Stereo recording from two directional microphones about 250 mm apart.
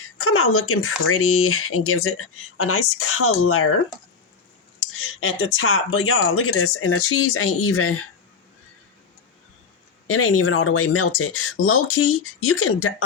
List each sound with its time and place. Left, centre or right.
0.0 s speech: left
4.8 s speech: left
10.1 s speech: left